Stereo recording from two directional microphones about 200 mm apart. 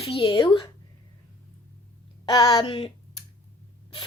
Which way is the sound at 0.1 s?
25° left (ahead or behind).